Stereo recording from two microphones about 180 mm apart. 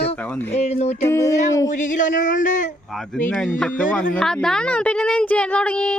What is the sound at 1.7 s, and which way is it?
Speech, 45° left (ahead or behind).